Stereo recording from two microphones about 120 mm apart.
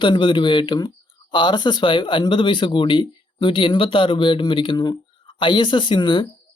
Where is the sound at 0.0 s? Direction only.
40° left (ahead or behind).